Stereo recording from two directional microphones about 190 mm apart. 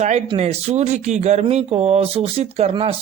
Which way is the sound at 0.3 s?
35° right (ahead or behind).